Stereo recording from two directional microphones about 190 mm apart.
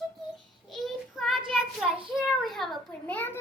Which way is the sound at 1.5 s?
Centre (ahead or behind).